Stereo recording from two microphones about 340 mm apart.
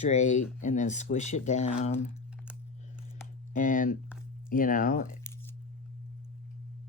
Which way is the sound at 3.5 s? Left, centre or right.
Left.